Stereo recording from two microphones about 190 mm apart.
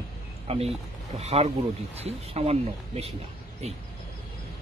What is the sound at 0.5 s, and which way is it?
Speech, 30° right (ahead or behind).